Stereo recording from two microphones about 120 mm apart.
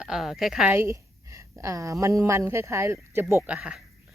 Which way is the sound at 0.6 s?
20° right (ahead or behind).